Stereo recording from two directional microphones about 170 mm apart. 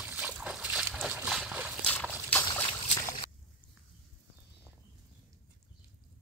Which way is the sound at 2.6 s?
25° left (ahead or behind).